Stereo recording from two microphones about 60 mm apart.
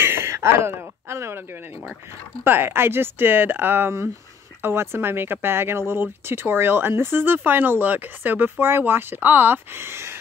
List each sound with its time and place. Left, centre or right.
0.0 s a sound: right
1.0 s speech: right
2.4 s speech: right